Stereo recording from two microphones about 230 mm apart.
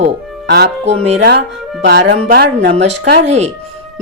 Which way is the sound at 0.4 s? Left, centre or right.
Right.